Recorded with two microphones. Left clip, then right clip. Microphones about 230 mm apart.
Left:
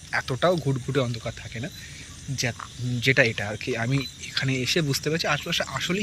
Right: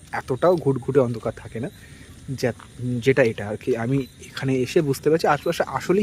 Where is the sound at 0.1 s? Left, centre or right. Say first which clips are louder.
Right 3 dB; centre.